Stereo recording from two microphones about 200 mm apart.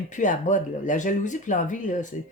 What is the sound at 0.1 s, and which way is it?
Speech, 40° left (ahead or behind).